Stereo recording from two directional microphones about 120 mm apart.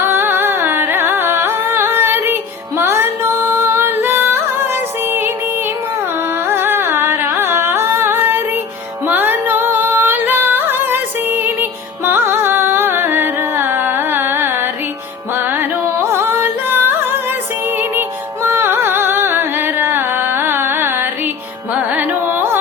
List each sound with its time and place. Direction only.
0.0 s music: 20° right (ahead or behind)
6.5 s music: 20° right (ahead or behind)
18.4 s music: 20° right (ahead or behind)
21.9 s carnatic music: 20° right (ahead or behind)